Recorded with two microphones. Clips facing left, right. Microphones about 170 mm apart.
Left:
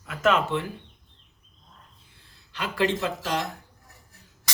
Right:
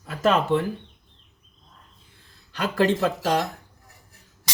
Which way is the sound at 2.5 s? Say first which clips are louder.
Right 4 dB; 40° right (ahead or behind).